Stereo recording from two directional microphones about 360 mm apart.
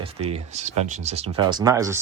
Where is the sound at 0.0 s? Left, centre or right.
Centre.